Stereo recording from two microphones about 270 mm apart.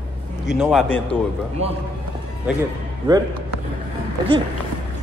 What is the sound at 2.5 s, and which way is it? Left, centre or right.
Speech, centre.